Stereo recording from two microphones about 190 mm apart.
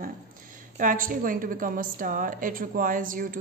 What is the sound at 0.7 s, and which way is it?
A woman's voice, 45° right (ahead or behind).